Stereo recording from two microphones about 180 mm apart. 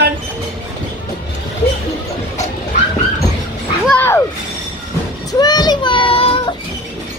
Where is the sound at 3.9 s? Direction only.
10° left (ahead or behind).